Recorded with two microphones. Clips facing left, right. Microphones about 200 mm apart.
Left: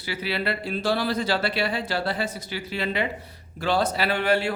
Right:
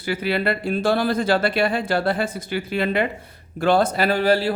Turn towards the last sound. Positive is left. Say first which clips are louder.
# right 4 dB
turn(degrees=-35)  # may be behind; listen again after turning